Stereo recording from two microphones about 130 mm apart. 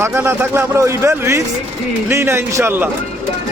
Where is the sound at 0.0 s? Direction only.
20° right (ahead or behind).